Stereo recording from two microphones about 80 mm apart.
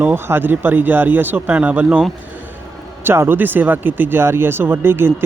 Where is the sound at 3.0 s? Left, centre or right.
Right.